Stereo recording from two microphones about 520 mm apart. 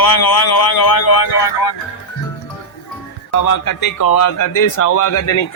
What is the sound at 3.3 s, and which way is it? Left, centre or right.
A man's voice, left.